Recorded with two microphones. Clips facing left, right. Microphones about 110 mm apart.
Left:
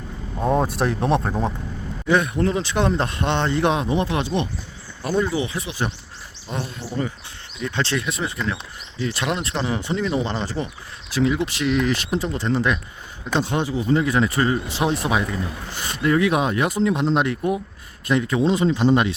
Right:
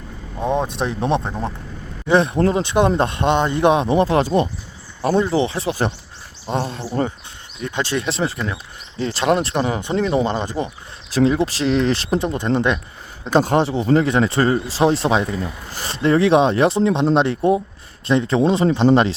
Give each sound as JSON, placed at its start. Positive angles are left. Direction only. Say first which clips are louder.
{"t": 0.3, "sound": "speech", "louder": "even", "side_deg": 5}
{"t": 2.0, "sound": "speech", "louder": "right 4 dB", "side_deg": -30}
{"t": 3.8, "sound": "speech", "louder": "right 6 dB", "side_deg": -35}
{"t": 7.8, "sound": "speech", "louder": "right 2 dB", "side_deg": -15}
{"t": 8.0, "sound": "speech", "louder": "right 3 dB", "side_deg": -30}
{"t": 10.4, "sound": "speech", "louder": "right 3 dB", "side_deg": -15}
{"t": 11.1, "sound": "speech", "louder": "right 4 dB", "side_deg": -35}
{"t": 13.3, "sound": "speech", "louder": "right 6 dB", "side_deg": -40}